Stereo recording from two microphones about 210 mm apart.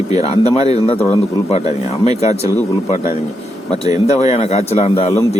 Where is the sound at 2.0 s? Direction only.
30° left (ahead or behind).